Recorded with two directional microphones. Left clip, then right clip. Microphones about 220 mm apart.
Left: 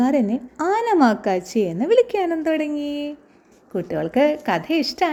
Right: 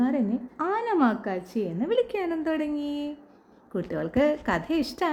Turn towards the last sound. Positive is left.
turn(degrees=5)  # may be behind; listen again after turning